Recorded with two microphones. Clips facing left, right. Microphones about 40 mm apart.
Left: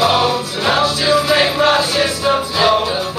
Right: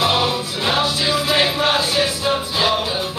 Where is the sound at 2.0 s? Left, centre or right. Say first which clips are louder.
Left 4 dB; centre.